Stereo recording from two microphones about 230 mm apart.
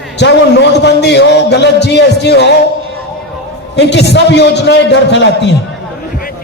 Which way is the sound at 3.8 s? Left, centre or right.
Left.